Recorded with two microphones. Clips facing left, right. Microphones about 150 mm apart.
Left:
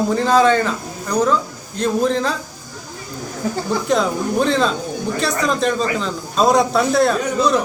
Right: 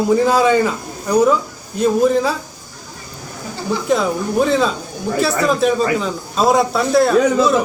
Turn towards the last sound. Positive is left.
turn(degrees=-5)  # may be behind; listen again after turning